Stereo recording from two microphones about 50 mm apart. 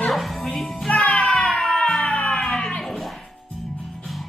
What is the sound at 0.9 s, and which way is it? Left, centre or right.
Music, left.